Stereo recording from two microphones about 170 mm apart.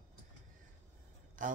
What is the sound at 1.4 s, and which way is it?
Speech, 50° right (ahead or behind).